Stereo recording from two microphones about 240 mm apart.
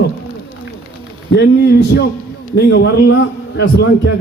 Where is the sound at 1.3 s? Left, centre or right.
Left.